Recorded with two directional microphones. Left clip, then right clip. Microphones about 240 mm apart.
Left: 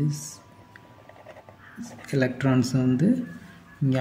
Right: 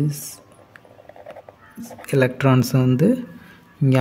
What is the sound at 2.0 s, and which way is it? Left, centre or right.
Speech, right.